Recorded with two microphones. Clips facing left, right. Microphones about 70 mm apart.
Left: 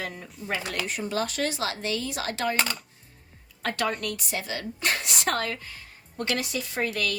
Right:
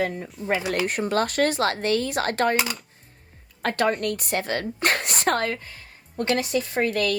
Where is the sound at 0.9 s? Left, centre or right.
Right.